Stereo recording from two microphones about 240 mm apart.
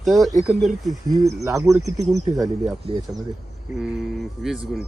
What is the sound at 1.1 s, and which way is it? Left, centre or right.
Speech, centre.